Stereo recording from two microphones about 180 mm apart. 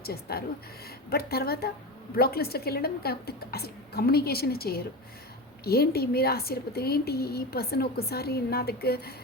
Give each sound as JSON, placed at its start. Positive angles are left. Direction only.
{"t": 0.0, "sound": "a woman's voice", "side_deg": 60}